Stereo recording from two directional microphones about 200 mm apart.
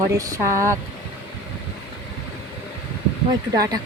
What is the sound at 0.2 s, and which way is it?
Speech, 15° right (ahead or behind).